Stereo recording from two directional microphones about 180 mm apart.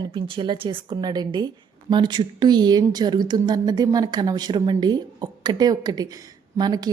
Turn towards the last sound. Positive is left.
turn(degrees=-25)  # may be behind; listen again after turning